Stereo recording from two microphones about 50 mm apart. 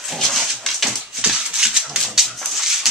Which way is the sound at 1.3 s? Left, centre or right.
Centre.